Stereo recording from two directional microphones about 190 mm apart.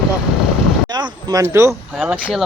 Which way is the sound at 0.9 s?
20° right (ahead or behind).